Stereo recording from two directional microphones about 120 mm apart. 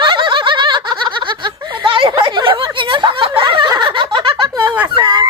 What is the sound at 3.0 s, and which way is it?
Snicker, 45° right (ahead or behind).